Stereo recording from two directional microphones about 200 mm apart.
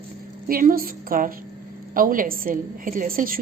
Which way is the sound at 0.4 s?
45° right (ahead or behind).